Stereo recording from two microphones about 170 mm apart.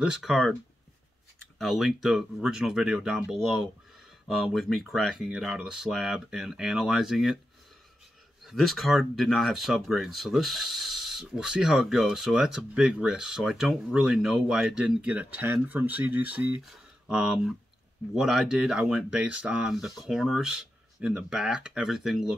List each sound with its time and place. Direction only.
0.0 s speech: centre (ahead or behind)
1.6 s speech: centre (ahead or behind)
8.5 s speech: centre (ahead or behind)